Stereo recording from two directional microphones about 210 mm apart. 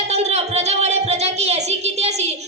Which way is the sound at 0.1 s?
30° right (ahead or behind).